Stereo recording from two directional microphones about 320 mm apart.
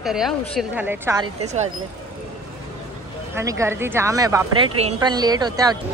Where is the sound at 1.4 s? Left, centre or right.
Right.